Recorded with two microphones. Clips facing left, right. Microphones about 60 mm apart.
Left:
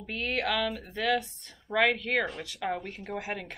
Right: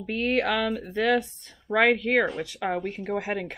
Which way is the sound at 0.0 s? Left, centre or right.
Right.